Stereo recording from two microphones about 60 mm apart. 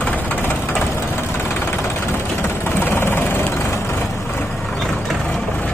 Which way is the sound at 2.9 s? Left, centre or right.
Left.